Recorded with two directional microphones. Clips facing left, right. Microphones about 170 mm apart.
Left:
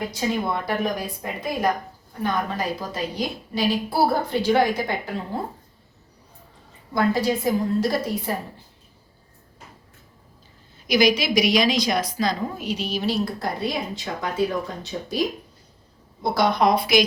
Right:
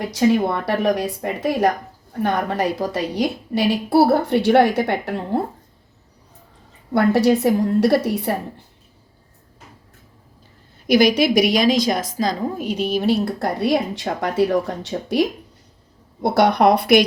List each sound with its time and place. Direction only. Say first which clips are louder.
0.1 s a woman's voice: right 8 dB; 75° right (ahead or behind)
6.9 s a woman's voice: right 6 dB; 70° right (ahead or behind)
10.8 s a woman's voice: right 5 dB; 60° right (ahead or behind)